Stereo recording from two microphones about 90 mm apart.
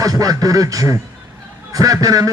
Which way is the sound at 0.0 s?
40° right (ahead or behind).